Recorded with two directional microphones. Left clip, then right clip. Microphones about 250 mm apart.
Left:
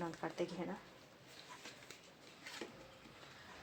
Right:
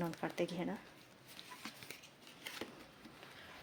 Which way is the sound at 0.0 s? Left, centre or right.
Right.